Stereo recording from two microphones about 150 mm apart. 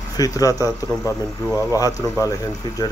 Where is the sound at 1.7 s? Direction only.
25° left (ahead or behind).